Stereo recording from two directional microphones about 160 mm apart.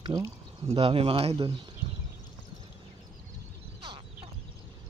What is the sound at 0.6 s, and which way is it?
Speech, 35° right (ahead or behind).